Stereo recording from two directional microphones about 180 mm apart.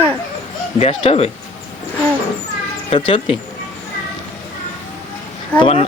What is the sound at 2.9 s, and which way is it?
Speech, 30° left (ahead or behind).